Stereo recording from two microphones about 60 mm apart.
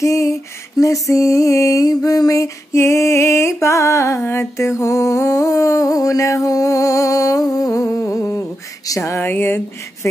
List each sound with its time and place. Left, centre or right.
0.0 s music: left
4.4 s mantra: left
8.1 s a sound: left
8.8 s music: left
9.2 s speech: left